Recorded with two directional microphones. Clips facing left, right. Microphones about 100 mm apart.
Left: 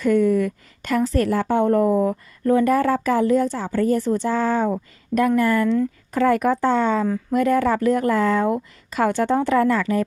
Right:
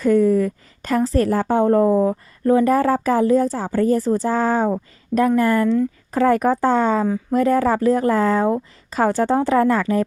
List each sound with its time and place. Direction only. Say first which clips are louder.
0.0 s a woman's voice: right 2 dB; 35° right (ahead or behind)